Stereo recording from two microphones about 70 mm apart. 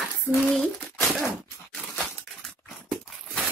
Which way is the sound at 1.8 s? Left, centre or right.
Centre.